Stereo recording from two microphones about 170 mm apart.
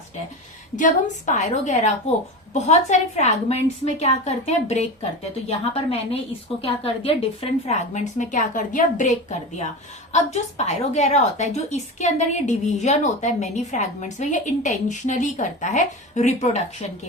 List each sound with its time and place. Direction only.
0.8 s a woman's voice: 50° left (ahead or behind)